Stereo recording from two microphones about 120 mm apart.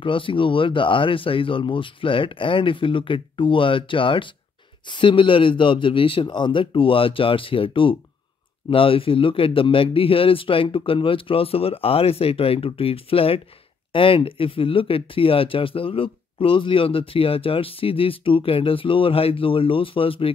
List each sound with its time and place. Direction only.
0.0 s speech: 45° left (ahead or behind)